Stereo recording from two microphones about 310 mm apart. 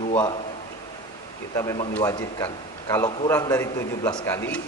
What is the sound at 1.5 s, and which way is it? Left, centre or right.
A man's voice, centre.